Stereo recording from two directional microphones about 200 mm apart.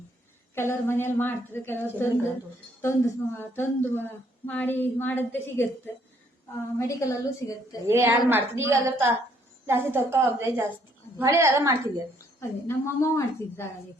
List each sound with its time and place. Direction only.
0.5 s speech: 10° left (ahead or behind)
7.9 s a woman's voice: 10° right (ahead or behind)
12.4 s speech: 15° left (ahead or behind)